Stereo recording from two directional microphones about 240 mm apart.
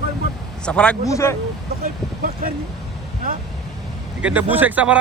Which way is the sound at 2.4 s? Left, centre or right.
Right.